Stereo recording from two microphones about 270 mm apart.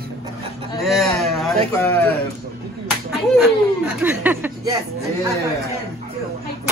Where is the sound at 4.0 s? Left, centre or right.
Centre.